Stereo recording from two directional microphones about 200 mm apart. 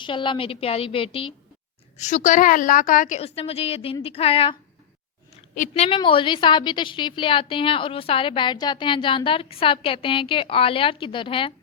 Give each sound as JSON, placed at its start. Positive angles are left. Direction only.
{"t": 0.0, "sound": "a woman's voice", "side_deg": 25}
{"t": 2.0, "sound": "a woman's voice", "side_deg": 40}
{"t": 5.5, "sound": "a woman's voice", "side_deg": 35}